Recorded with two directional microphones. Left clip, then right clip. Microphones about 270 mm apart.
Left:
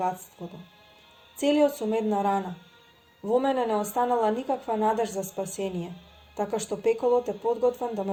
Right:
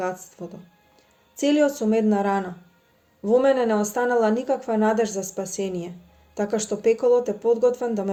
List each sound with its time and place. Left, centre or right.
0.4 s speech: centre
5.2 s speech: left
5.5 s speech: left